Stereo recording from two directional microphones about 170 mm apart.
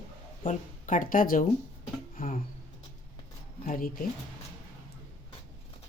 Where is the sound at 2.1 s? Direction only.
55° left (ahead or behind).